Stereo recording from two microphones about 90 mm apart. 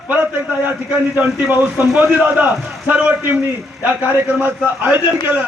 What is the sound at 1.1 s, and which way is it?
A man's voice, 15° right (ahead or behind).